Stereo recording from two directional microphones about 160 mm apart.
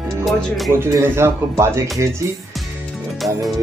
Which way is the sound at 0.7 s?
15° right (ahead or behind).